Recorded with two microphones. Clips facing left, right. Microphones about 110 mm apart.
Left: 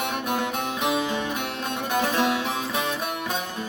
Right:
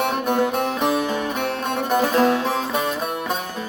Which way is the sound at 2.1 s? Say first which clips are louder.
Right 8 dB; 40° right (ahead or behind).